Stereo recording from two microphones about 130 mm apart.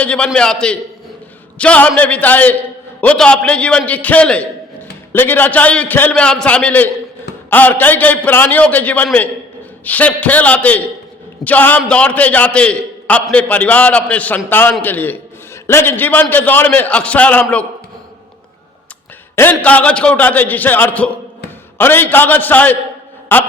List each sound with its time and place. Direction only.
0.0 s a man's voice: 10° left (ahead or behind)
19.4 s a man's voice: 10° left (ahead or behind)